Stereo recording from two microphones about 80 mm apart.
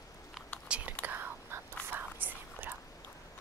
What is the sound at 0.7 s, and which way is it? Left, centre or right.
Whispering, centre.